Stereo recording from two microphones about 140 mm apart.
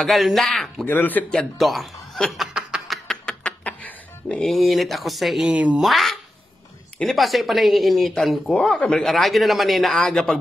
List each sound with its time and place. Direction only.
0.0 s speech: centre (ahead or behind)
0.8 s speech: 15° left (ahead or behind)